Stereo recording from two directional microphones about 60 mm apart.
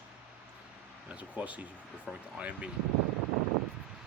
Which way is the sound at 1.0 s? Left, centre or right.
Right.